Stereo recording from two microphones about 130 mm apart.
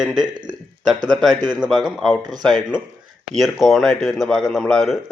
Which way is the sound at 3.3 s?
Centre (ahead or behind).